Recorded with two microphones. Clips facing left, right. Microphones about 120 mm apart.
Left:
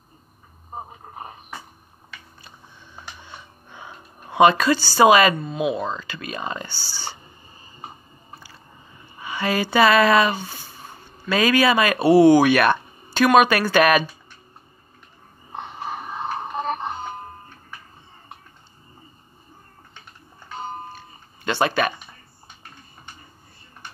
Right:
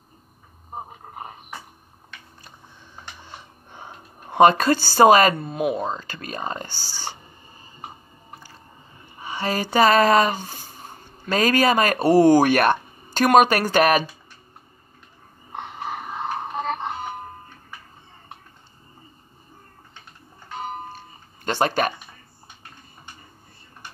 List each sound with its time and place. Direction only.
3.2 s speech: 40° right (ahead or behind)
9.2 s speech: 35° right (ahead or behind)
21.5 s speech: 40° right (ahead or behind)